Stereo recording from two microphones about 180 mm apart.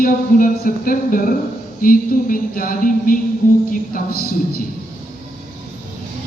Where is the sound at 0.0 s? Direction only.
50° left (ahead or behind).